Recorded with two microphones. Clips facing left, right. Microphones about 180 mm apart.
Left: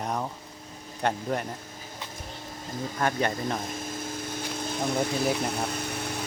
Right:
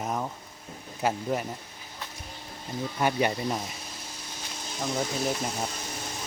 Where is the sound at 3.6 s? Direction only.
50° left (ahead or behind).